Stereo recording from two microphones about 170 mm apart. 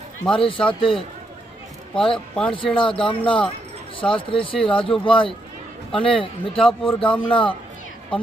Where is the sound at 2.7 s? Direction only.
30° left (ahead or behind).